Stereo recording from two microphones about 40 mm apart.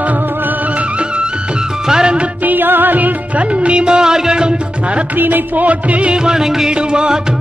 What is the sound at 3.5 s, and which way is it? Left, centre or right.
Music of bollywood, right.